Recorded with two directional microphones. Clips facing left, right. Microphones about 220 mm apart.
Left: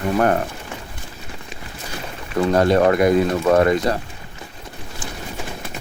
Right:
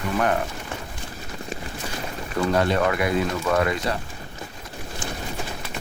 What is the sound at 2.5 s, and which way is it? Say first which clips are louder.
Speech: left 7 dB; 40° left (ahead or behind).